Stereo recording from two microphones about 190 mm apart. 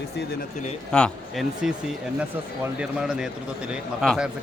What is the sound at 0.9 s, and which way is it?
Speech, 5° left (ahead or behind).